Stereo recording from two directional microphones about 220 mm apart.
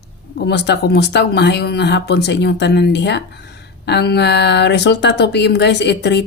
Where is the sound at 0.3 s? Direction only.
50° left (ahead or behind).